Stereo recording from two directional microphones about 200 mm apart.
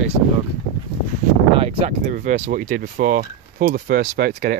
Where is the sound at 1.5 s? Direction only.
30° right (ahead or behind).